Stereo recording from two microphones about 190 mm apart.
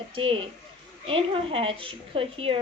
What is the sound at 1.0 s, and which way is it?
A woman's voice, 30° right (ahead or behind).